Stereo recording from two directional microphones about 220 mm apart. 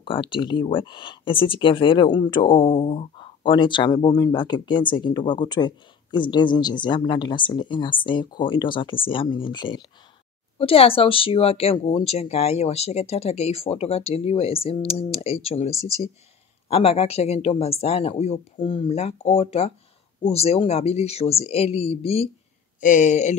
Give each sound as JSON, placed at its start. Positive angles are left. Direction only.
{"t": 0.0, "sound": "speech", "side_deg": 25}
{"t": 15.7, "sound": "speech", "side_deg": -15}
{"t": 16.6, "sound": "speech", "side_deg": 25}